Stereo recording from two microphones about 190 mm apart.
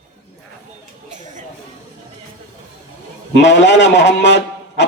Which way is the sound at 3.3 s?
65° left (ahead or behind).